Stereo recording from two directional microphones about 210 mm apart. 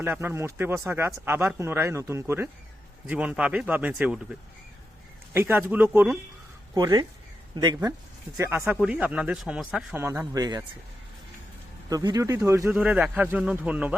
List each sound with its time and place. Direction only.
0.0 s speech: 10° right (ahead or behind)
5.3 s speech: 10° right (ahead or behind)
11.9 s speech: 15° right (ahead or behind)